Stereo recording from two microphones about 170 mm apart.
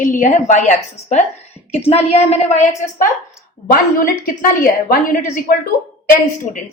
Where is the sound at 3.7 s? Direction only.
55° left (ahead or behind).